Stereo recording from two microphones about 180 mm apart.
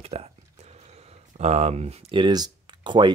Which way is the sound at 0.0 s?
35° right (ahead or behind).